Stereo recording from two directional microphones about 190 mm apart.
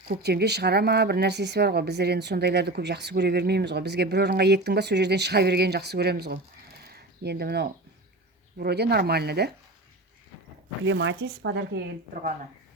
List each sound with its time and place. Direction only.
0.1 s a woman's voice: 60° right (ahead or behind)
6.8 s a sound: 60° right (ahead or behind)
8.5 s a woman's voice: 60° right (ahead or behind)
10.8 s a woman's voice: 75° right (ahead or behind)